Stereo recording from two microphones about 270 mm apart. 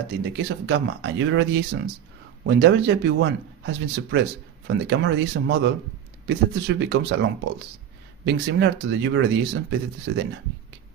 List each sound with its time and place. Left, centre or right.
0.1 s speech: right